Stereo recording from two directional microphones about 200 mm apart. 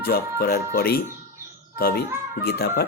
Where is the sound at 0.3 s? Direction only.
50° left (ahead or behind).